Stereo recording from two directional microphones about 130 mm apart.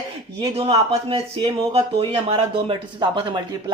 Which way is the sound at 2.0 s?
45° right (ahead or behind).